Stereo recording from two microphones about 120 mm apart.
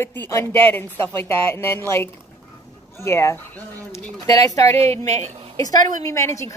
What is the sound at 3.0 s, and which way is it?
A woman's voice, 20° left (ahead or behind).